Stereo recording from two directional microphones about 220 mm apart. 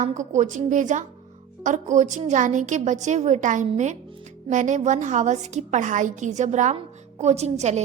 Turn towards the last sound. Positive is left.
turn(degrees=-30)  # may be behind; listen again after turning